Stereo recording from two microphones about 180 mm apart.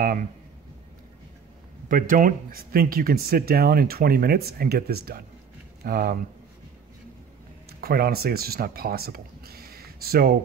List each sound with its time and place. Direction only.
1.9 s speech: 50° right (ahead or behind)
7.8 s speech: 55° right (ahead or behind)